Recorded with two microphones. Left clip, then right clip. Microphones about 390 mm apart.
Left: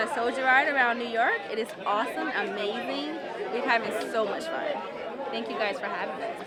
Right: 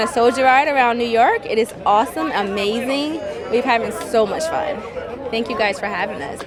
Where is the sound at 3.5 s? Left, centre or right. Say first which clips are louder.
Right 9 dB; right.